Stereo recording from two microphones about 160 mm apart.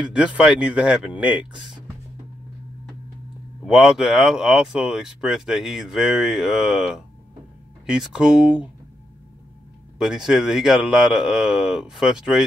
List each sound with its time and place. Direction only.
0.0 s speech: 5° right (ahead or behind)
3.6 s speech: centre (ahead or behind)
9.9 s speech: 5° right (ahead or behind)